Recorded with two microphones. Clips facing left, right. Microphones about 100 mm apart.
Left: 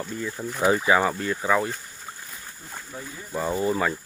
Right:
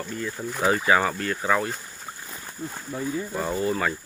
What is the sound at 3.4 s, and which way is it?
Speech, 20° left (ahead or behind).